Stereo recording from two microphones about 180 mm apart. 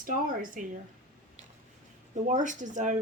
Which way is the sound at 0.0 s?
50° right (ahead or behind).